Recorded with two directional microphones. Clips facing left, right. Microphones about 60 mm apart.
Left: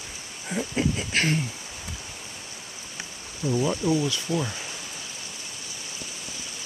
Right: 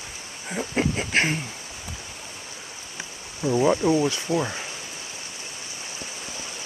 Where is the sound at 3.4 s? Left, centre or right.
Right.